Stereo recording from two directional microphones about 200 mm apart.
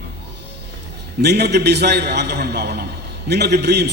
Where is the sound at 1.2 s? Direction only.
55° right (ahead or behind).